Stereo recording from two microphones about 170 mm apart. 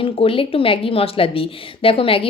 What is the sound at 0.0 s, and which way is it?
A woman's voice, 30° left (ahead or behind).